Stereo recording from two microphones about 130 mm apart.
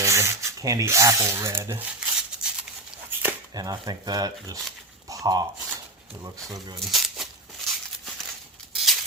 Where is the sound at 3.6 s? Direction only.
30° right (ahead or behind).